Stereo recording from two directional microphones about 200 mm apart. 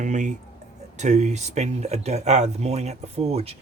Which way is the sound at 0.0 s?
40° right (ahead or behind).